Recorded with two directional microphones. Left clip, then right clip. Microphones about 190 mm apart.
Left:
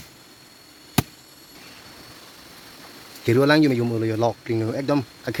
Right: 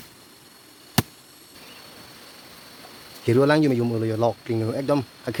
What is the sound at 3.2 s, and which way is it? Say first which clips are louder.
Speech: left 1 dB; 5° right (ahead or behind).